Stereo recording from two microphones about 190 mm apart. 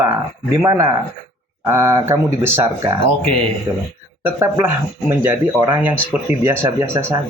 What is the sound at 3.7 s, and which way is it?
Speech, 25° right (ahead or behind).